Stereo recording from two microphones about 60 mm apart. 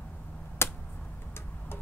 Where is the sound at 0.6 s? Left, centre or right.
Left.